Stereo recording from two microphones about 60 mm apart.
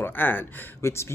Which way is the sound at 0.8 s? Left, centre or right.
Left.